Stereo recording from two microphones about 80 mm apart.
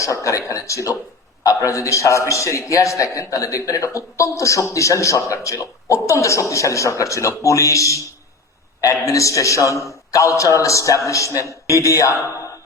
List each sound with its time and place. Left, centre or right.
0.0 s a man's voice: left